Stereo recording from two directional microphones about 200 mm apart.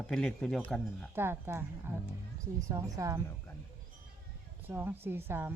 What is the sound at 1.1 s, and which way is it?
A woman's voice, 10° right (ahead or behind).